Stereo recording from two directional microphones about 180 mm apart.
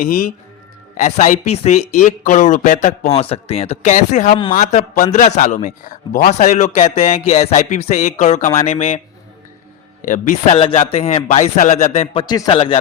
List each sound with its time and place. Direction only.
0.0 s speech: 50° left (ahead or behind)
0.9 s a man's voice: 40° left (ahead or behind)
10.1 s a man's voice: 40° left (ahead or behind)